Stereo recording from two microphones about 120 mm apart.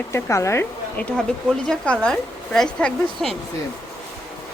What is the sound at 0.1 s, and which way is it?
Speech, 25° left (ahead or behind).